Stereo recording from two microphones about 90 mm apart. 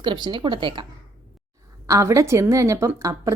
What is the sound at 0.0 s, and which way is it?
Speech, 65° right (ahead or behind).